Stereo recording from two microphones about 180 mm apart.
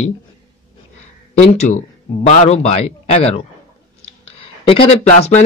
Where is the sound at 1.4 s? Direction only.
40° left (ahead or behind).